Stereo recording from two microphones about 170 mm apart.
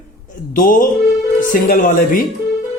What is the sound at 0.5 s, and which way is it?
Speech, 55° left (ahead or behind).